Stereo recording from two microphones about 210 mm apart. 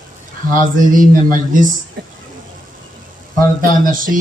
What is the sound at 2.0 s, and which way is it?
Speech, 50° right (ahead or behind).